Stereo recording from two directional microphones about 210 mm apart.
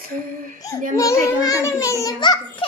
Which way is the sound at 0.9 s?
15° left (ahead or behind).